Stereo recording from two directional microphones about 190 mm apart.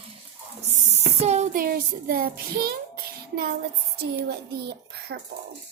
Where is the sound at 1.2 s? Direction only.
35° right (ahead or behind).